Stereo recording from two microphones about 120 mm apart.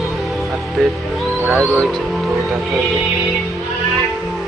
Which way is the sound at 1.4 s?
15° right (ahead or behind).